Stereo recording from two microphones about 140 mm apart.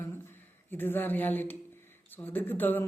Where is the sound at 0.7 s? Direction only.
15° left (ahead or behind).